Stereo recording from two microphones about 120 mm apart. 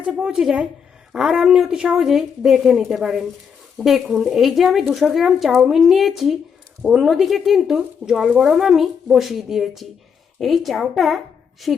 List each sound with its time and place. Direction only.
0.0 s a woman's voice: 5° right (ahead or behind)